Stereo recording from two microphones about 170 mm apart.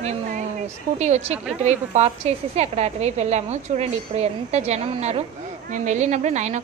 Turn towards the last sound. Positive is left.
turn(degrees=-45)  # may be behind; listen again after turning